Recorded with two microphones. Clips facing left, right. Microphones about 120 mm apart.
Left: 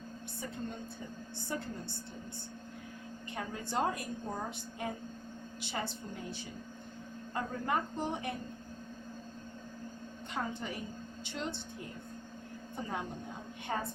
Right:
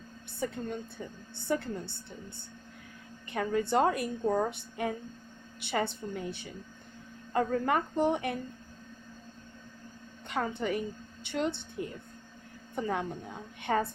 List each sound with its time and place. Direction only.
0.4 s a woman's voice: 80° right
1.5 s a woman's voice: 65° right (ahead or behind)
3.3 s a woman's voice: 65° right (ahead or behind)
5.5 s a woman's voice: 60° right (ahead or behind)
7.3 s a woman's voice: 70° right (ahead or behind)
10.3 s a woman's voice: 65° right (ahead or behind)
12.7 s a woman's voice: 65° right (ahead or behind)
13.7 s a woman's voice: 75° right (ahead or behind)